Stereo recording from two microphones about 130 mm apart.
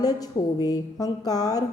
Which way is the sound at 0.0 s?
30° left (ahead or behind).